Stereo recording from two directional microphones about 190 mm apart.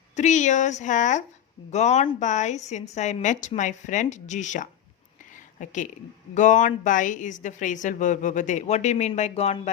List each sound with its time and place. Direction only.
0.2 s speech: 40° left (ahead or behind)